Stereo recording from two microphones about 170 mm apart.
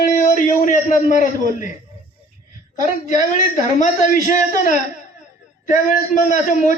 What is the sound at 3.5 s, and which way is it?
A man's voice, 45° left (ahead or behind).